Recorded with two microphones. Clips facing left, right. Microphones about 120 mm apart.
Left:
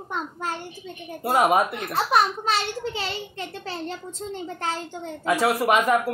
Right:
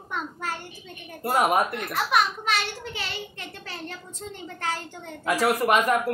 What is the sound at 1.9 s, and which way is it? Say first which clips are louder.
A child's voice: left 3 dB; 30° left (ahead or behind).